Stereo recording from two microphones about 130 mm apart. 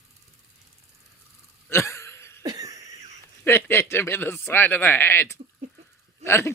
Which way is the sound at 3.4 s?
15° left (ahead or behind).